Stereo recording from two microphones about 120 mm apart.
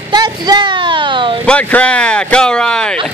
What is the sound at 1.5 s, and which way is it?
Speech, 10° left (ahead or behind).